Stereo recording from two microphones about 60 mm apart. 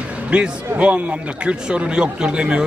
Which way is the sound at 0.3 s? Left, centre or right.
Centre.